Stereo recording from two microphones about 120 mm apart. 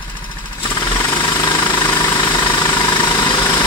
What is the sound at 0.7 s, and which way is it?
Vehicle, 20° left (ahead or behind).